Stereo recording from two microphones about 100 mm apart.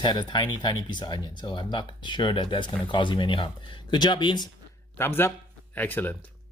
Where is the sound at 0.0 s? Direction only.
50° left (ahead or behind).